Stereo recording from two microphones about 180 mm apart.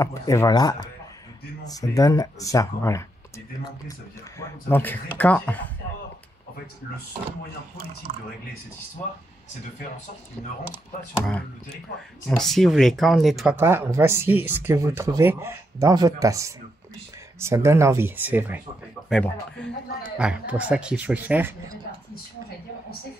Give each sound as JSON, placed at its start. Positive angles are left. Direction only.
{"t": 0.0, "sound": "speech", "side_deg": 15}
{"t": 4.4, "sound": "speech", "side_deg": 10}
{"t": 11.2, "sound": "speech", "side_deg": 5}
{"t": 13.6, "sound": "speech", "side_deg": -15}
{"t": 19.0, "sound": "speech", "side_deg": 5}